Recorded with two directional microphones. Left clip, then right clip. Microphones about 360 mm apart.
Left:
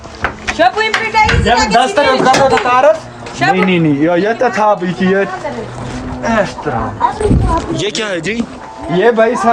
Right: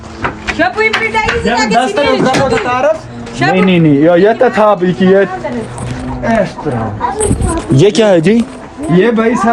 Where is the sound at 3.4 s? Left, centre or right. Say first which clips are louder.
Right 1 dB; centre.